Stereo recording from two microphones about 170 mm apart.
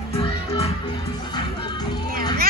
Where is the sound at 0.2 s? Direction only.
35° left (ahead or behind).